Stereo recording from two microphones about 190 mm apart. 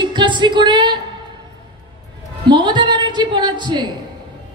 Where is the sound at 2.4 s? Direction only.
25° right (ahead or behind).